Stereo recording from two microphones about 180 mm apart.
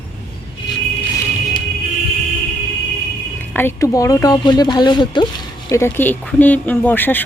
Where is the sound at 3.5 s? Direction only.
10° left (ahead or behind).